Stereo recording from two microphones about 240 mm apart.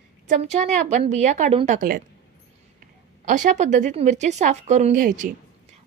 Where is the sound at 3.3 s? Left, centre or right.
Right.